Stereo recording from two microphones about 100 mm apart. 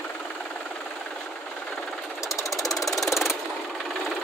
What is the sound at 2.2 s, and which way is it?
Engine knocking, 30° left (ahead or behind).